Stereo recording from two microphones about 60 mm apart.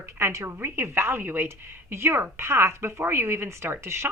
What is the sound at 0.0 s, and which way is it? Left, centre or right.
A woman's voice, right.